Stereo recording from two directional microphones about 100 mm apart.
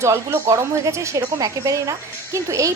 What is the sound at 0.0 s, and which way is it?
A woman's voice, 25° right (ahead or behind).